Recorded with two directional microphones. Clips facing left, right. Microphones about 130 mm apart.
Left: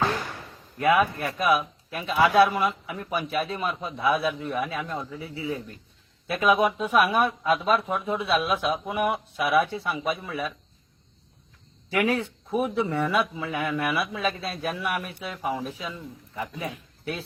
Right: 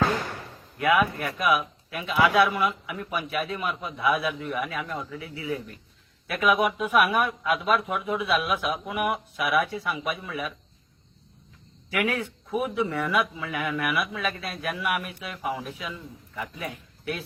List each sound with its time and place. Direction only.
0.8 s speech: 30° left (ahead or behind)
11.9 s speech: 30° left (ahead or behind)